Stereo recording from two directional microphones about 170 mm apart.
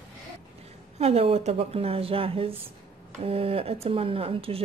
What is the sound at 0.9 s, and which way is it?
Speech, 35° right (ahead or behind).